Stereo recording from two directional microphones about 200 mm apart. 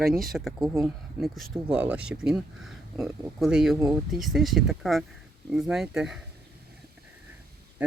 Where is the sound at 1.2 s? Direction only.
5° right (ahead or behind).